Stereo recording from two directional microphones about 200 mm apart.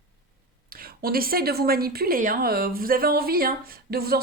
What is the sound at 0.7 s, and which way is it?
A woman's voice, 50° right (ahead or behind).